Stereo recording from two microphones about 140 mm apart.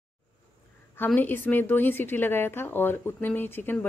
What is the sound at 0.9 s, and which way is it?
A woman's voice, 15° left (ahead or behind).